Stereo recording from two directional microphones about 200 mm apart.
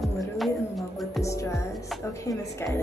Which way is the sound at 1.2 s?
15° left (ahead or behind).